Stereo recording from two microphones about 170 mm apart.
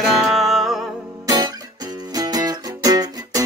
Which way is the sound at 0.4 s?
Centre (ahead or behind).